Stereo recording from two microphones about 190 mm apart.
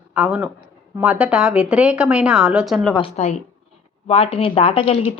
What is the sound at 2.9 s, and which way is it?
Speech, 30° left (ahead or behind).